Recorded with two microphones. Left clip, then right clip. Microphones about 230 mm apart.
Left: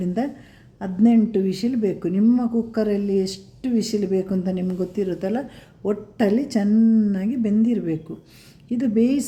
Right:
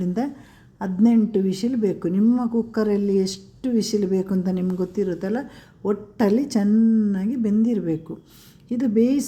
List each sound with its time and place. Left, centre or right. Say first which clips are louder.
0.0 s a woman's voice: left 1 dB; centre
6.7 s speech: left 2 dB; centre